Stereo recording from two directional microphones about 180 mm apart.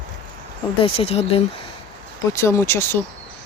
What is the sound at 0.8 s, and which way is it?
Speech, 30° left (ahead or behind).